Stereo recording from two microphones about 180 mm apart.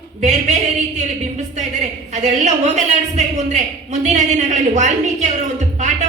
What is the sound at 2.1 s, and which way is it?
A man's voice, 40° right (ahead or behind).